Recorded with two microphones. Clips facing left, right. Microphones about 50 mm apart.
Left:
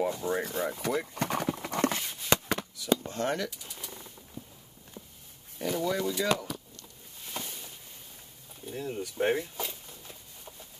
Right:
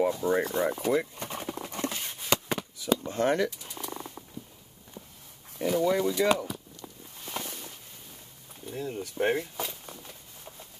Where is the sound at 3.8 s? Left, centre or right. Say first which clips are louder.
Right 7 dB; right.